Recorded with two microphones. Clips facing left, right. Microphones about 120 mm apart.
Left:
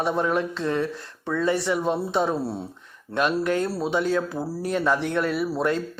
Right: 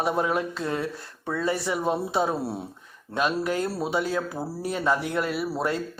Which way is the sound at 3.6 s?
10° right (ahead or behind).